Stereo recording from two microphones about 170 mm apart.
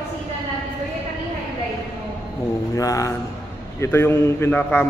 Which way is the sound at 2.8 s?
20° left (ahead or behind).